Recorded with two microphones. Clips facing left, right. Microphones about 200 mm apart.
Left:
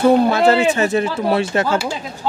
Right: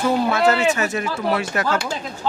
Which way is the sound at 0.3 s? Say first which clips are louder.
Left 3 dB; 30° left (ahead or behind).